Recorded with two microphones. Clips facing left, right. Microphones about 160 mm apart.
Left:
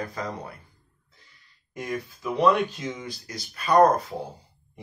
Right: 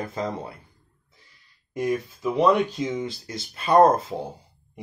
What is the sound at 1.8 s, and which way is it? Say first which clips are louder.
Speech: right 6 dB; 20° right (ahead or behind).